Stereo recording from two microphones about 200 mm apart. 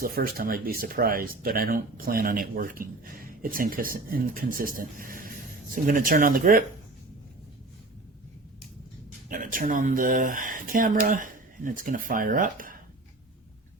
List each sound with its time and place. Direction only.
0.0 s speech: 45° right (ahead or behind)
9.3 s speech: 45° right (ahead or behind)